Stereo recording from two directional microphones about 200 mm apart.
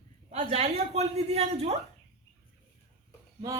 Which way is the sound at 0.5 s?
30° right (ahead or behind).